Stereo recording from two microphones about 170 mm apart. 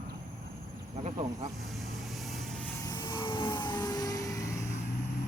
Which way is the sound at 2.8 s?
25° left (ahead or behind).